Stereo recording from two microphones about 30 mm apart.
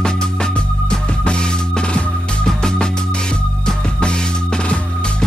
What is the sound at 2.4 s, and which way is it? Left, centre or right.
Music, left.